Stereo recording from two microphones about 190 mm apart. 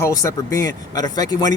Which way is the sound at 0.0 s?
15° left (ahead or behind).